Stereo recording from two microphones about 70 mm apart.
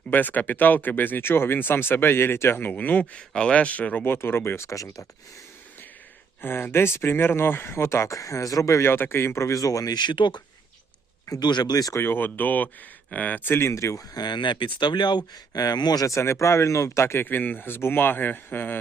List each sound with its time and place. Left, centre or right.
0.1 s speech: left
6.4 s speech: left
8.9 s speech: left
9.9 s speech: left
11.9 s speech: left
13.4 s speech: left
14.1 s speech: left
16.0 s speech: left